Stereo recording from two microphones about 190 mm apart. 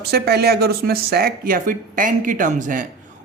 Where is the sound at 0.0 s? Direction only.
55° right (ahead or behind).